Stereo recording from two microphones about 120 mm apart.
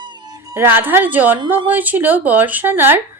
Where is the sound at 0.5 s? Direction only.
20° right (ahead or behind).